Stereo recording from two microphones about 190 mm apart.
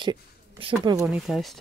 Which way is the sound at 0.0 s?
25° right (ahead or behind).